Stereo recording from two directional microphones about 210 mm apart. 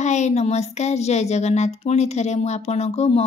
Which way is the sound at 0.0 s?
35° left (ahead or behind).